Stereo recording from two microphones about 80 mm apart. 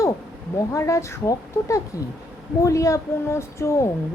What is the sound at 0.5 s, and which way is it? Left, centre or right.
A woman's voice, left.